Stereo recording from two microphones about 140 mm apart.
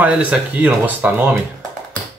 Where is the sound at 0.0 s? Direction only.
10° right (ahead or behind).